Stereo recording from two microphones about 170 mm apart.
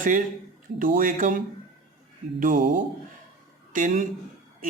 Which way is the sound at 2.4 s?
50° right (ahead or behind).